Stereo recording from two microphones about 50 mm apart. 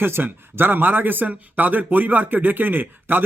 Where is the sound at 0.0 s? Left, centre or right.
Right.